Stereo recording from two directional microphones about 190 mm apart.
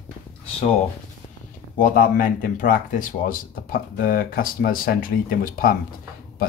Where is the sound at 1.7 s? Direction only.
45° left (ahead or behind).